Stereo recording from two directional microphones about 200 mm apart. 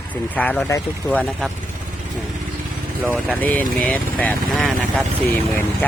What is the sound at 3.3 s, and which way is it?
Speech, 5° left (ahead or behind).